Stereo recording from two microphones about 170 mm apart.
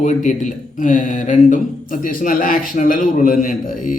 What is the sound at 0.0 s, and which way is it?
Speech, 45° left (ahead or behind).